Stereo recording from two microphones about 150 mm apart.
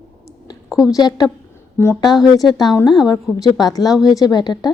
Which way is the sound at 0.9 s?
25° left (ahead or behind).